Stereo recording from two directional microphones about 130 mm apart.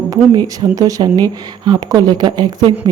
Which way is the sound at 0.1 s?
30° right (ahead or behind).